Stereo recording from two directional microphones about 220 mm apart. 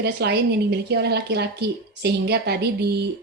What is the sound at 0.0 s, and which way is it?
Speech, 50° right (ahead or behind).